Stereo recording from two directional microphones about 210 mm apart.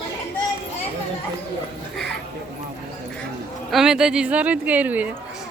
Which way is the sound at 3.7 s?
5° right (ahead or behind).